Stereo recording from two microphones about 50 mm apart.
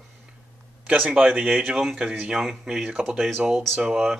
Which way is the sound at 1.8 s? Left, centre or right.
Centre.